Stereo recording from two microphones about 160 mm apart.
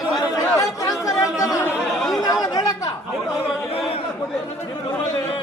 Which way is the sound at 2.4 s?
25° left (ahead or behind).